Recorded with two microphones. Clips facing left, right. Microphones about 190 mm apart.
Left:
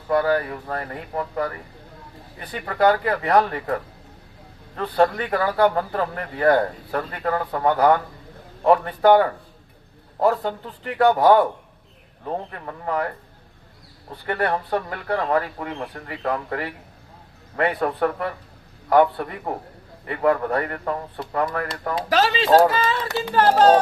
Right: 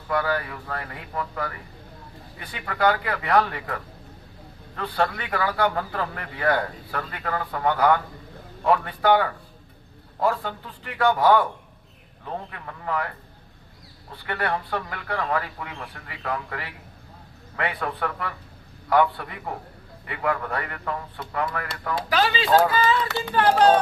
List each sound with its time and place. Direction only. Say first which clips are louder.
0.1 s a man's voice: left 5 dB; 40° left (ahead or behind)